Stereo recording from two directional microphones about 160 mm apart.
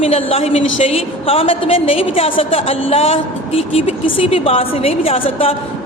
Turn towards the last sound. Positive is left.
turn(degrees=35)  # may be behind; listen again after turning